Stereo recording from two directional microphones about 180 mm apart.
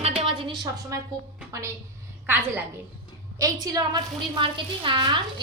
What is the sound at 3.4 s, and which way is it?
A woman's voice, 20° right (ahead or behind).